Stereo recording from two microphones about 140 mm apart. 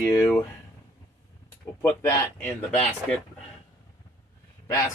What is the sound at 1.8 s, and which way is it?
Speech, 15° left (ahead or behind).